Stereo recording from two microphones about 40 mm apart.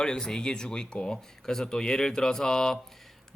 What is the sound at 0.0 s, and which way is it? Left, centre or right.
A man's voice, centre.